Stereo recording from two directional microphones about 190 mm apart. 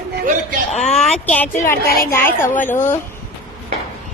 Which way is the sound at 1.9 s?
50° left (ahead or behind).